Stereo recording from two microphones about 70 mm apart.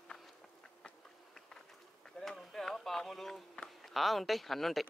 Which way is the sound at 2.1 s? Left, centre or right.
Centre.